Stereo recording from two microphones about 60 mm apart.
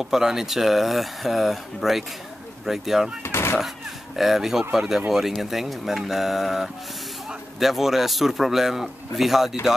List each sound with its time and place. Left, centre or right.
0.0 s a man's voice: centre
3.3 s speech: left
4.2 s a man's voice: centre